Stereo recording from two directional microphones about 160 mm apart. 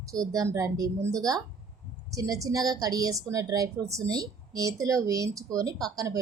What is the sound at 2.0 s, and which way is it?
Speech, 20° right (ahead or behind).